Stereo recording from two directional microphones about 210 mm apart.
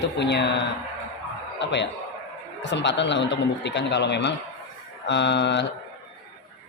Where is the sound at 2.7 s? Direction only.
55° left (ahead or behind).